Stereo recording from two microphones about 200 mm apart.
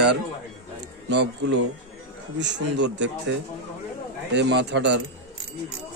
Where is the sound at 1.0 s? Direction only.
60° right (ahead or behind).